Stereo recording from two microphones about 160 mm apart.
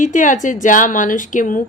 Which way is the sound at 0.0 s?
50° left (ahead or behind).